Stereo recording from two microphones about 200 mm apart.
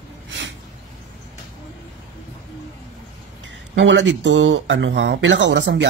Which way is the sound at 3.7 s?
65° right (ahead or behind).